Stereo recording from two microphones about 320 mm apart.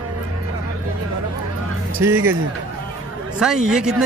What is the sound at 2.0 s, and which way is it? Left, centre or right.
Speech, centre.